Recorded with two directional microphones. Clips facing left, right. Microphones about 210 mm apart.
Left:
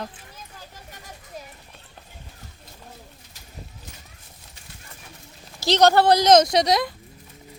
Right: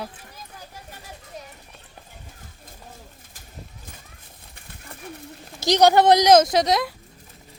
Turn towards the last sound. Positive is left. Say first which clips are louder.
# even
turn(degrees=0)  # may be behind; listen again after turning